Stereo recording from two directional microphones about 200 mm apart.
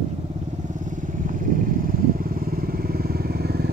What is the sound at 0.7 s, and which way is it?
Motorcycle, 40° right (ahead or behind).